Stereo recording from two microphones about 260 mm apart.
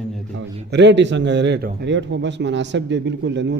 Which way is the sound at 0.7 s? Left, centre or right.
Right.